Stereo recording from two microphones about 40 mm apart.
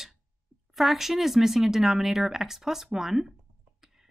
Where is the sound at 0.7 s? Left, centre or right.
Centre.